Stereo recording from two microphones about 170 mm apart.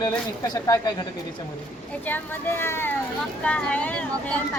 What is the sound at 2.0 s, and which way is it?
Speech, 10° left (ahead or behind).